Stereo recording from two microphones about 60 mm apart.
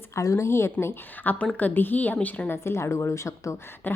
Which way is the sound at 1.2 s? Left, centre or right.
Left.